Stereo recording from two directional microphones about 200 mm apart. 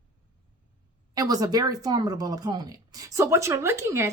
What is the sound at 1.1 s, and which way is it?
Speech, 20° right (ahead or behind).